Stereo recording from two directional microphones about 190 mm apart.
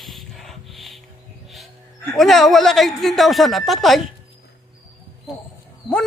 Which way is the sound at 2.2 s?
Centre (ahead or behind).